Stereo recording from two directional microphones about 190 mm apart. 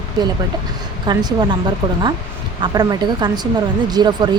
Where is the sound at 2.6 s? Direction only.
20° right (ahead or behind).